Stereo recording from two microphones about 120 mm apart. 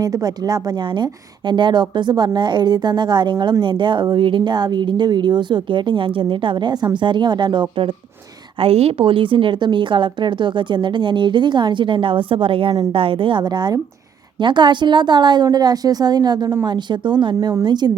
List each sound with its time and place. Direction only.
0.0 s speech: 30° right (ahead or behind)
8.6 s a woman's voice: 55° right (ahead or behind); by 17.9 s 35° right (ahead or behind)